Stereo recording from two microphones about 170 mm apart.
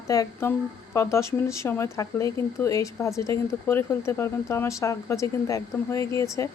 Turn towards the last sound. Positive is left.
turn(degrees=15)  # may be behind; listen again after turning